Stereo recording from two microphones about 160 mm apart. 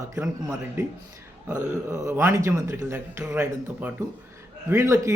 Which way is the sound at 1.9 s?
15° right (ahead or behind).